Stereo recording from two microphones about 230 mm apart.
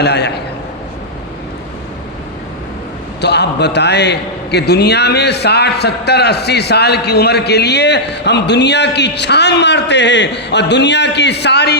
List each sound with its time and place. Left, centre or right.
0.0 s a man's voice: left
3.2 s a man's voice: left